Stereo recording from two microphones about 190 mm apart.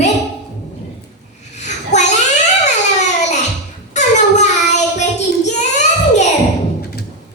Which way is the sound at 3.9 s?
40° left (ahead or behind).